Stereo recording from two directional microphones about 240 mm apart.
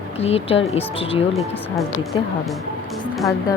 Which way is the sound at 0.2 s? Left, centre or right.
Left.